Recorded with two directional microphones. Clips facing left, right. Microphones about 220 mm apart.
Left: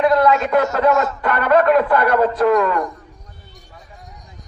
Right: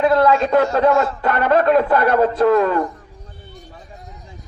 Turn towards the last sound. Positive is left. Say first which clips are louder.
# right 1 dB
turn(degrees=-30)  # may be behind; listen again after turning